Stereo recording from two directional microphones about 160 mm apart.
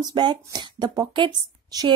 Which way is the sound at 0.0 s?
30° right (ahead or behind).